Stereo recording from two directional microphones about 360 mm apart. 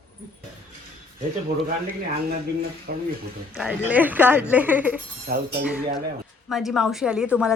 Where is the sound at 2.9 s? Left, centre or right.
Right.